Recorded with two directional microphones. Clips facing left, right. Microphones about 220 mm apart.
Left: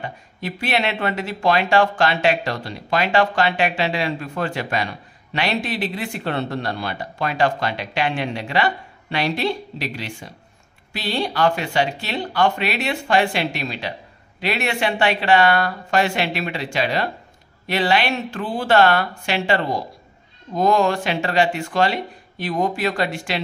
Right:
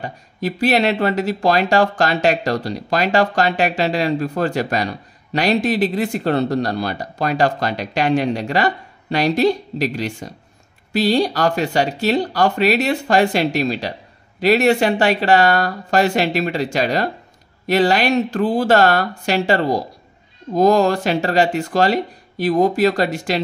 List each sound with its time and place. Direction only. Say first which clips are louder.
0.0 s speech: right 6 dB; 40° right (ahead or behind)